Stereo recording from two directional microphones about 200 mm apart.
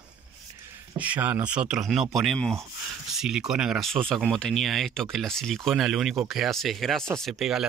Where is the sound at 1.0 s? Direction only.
5° right (ahead or behind).